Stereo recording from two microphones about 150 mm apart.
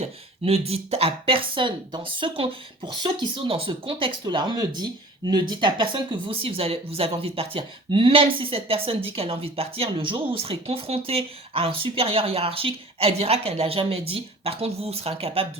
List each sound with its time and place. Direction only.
0.0 s a woman's voice: 45° right (ahead or behind)